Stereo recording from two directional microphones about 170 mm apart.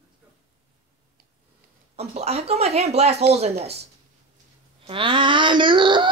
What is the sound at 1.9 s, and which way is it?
Speech, 40° right (ahead or behind).